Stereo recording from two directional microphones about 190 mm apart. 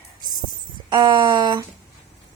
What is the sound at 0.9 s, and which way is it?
Speech, 25° right (ahead or behind).